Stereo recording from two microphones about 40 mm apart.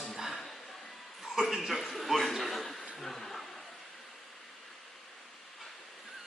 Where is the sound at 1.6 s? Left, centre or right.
Centre.